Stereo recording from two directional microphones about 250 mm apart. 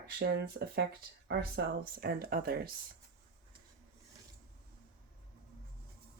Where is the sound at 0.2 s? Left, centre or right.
Right.